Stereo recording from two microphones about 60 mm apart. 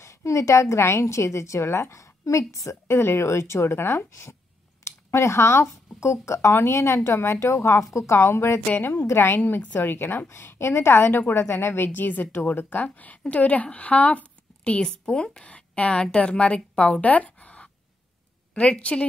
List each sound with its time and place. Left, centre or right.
0.0 s a woman's voice: left
8.6 s a woman's voice: left
8.9 s a woman's voice: left